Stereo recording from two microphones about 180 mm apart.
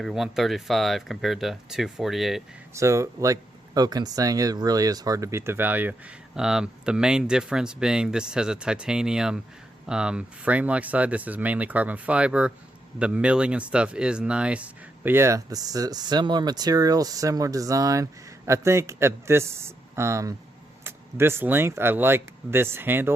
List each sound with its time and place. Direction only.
0.0 s speech: centre (ahead or behind)
2.7 s speech: 15° right (ahead or behind)